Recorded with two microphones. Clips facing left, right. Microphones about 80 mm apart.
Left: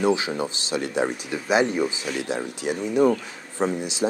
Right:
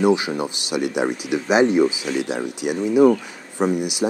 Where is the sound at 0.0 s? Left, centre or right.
Centre.